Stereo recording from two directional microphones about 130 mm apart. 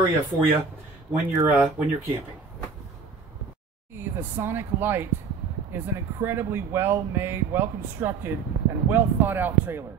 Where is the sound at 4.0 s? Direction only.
15° right (ahead or behind).